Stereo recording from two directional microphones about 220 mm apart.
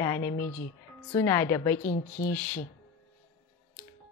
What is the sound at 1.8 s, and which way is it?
Speech, 35° left (ahead or behind).